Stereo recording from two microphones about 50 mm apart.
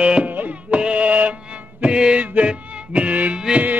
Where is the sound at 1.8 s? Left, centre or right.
Centre.